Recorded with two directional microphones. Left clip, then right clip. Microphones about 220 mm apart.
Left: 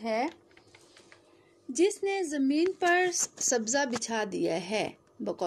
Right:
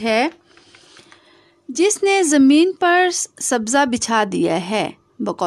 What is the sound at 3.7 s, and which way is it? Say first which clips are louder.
Speech: right 13 dB; 40° right (ahead or behind).